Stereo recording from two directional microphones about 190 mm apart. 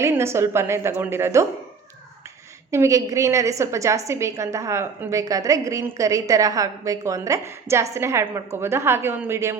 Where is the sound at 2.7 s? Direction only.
15° right (ahead or behind).